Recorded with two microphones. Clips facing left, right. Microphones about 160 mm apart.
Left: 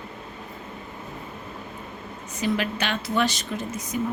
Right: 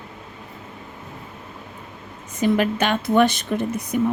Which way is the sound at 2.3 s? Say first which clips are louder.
Right 6 dB; 50° right (ahead or behind).